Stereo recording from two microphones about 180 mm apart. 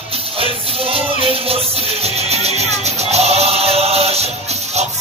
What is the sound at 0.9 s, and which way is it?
Music, 30° right (ahead or behind).